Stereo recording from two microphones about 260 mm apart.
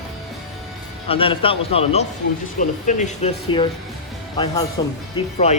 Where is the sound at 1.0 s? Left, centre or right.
Left.